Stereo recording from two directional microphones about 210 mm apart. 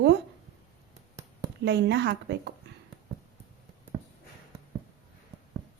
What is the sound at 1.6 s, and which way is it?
Speech, 55° right (ahead or behind).